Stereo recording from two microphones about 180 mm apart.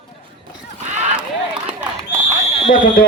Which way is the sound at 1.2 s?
5° right (ahead or behind).